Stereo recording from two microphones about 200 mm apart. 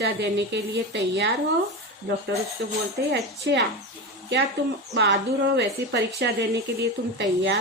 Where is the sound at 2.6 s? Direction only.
60° right (ahead or behind).